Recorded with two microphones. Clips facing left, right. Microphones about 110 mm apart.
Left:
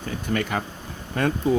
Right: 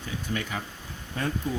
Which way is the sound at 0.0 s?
60° left (ahead or behind).